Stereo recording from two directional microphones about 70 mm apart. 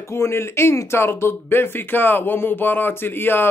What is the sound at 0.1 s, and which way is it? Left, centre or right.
Speech, left.